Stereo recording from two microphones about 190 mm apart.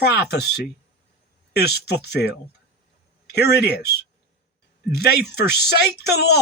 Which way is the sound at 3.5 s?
60° left (ahead or behind).